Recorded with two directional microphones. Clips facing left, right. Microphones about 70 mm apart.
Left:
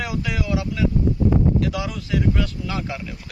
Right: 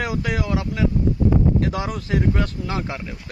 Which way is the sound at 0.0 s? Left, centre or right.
Right.